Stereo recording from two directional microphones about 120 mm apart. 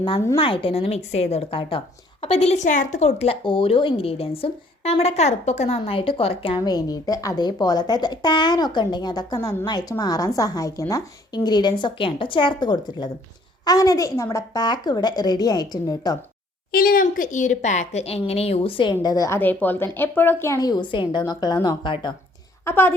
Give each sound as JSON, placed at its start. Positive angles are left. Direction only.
{"t": 0.3, "sound": "speech", "side_deg": 50}
{"t": 6.7, "sound": "a woman's voice", "side_deg": 35}
{"t": 17.0, "sound": "a woman's voice", "side_deg": 90}
{"t": 19.0, "sound": "a woman's voice", "side_deg": 30}
{"t": 19.4, "sound": "speech", "side_deg": 15}
{"t": 22.6, "sound": "a woman's voice", "side_deg": 20}